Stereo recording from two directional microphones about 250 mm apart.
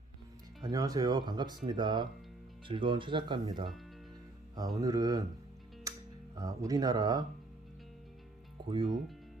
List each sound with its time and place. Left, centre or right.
0.6 s speech: centre
5.9 s music: centre
6.3 s speech: centre